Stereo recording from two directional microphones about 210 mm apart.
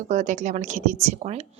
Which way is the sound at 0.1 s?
35° right (ahead or behind).